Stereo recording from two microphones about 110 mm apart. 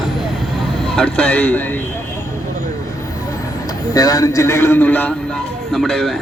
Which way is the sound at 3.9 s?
35° left (ahead or behind).